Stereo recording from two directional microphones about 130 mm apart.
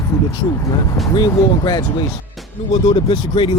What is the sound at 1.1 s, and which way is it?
Speech, 35° left (ahead or behind).